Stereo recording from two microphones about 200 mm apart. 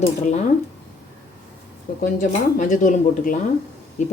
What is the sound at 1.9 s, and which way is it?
Speech, 45° left (ahead or behind).